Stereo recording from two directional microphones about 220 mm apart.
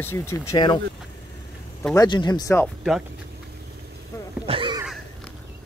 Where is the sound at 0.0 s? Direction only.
10° left (ahead or behind).